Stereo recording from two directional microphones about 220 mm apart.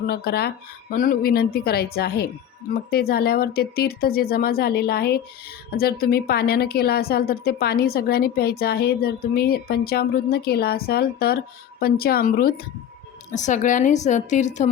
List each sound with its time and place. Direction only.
0.0 s a woman's voice: 45° left (ahead or behind)